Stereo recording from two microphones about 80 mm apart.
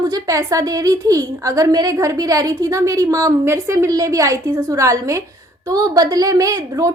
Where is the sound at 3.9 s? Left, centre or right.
Right.